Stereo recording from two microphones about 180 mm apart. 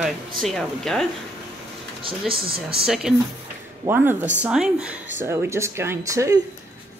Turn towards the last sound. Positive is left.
turn(degrees=-15)  # may be behind; listen again after turning